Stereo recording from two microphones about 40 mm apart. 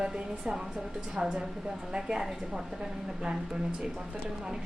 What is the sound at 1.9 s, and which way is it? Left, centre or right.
Speech, centre.